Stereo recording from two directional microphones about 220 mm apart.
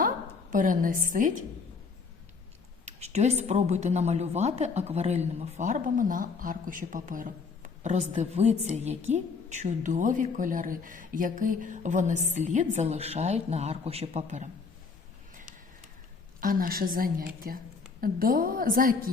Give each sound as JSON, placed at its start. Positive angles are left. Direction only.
{"t": 0.5, "sound": "speech", "side_deg": -35}
{"t": 2.8, "sound": "speech", "side_deg": -30}
{"t": 16.4, "sound": "speech", "side_deg": -40}